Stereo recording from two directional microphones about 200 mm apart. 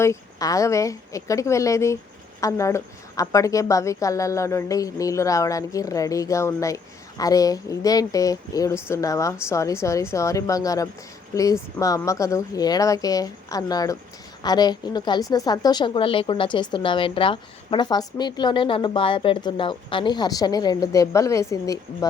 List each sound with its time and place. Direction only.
0.0 s a woman's voice: 15° left (ahead or behind)